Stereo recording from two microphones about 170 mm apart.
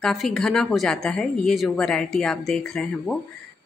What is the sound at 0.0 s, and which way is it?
Speech, centre (ahead or behind).